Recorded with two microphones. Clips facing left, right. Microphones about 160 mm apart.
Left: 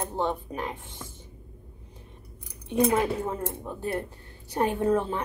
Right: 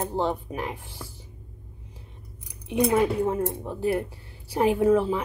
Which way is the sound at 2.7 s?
5° right (ahead or behind).